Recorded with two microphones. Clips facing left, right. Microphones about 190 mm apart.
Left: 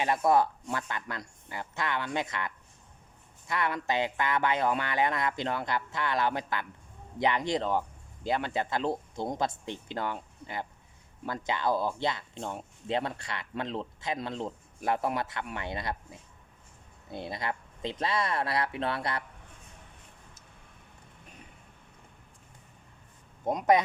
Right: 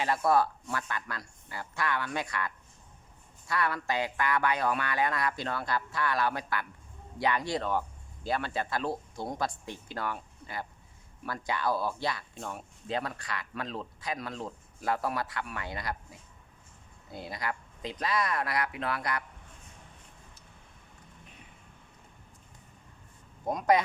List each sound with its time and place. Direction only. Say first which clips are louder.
0.0 s speech: left 1 dB; 20° left (ahead or behind)
23.5 s speech: left 1 dB; 20° left (ahead or behind)